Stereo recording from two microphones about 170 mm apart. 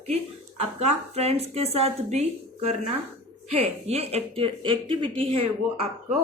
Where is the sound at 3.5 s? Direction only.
35° right (ahead or behind).